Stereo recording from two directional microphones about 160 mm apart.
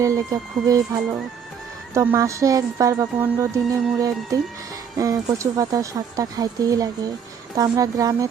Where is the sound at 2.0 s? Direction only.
20° right (ahead or behind).